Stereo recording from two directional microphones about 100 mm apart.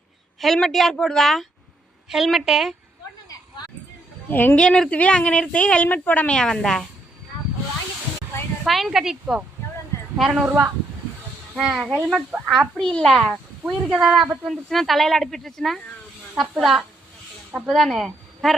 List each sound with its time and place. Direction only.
0.3 s speech: 5° left (ahead or behind)
4.3 s speech: 20° left (ahead or behind)
8.6 s speech: centre (ahead or behind)
10.4 s speech: 20° right (ahead or behind)
11.5 s speech: centre (ahead or behind)
13.1 s speech: 5° right (ahead or behind)